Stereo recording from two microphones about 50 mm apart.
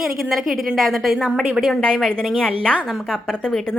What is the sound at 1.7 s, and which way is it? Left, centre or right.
A woman's voice, centre.